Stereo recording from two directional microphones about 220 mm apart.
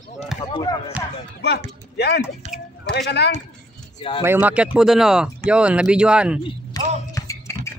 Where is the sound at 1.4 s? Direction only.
50° left (ahead or behind).